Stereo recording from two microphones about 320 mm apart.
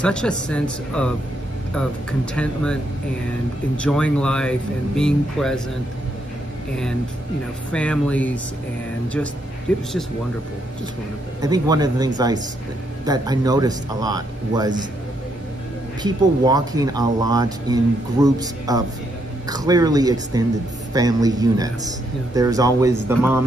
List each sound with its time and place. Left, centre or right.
0.0 s speech: centre
7.7 s speech: centre
9.7 s speech: centre
11.4 s a man's voice: centre
16.0 s a man's voice: centre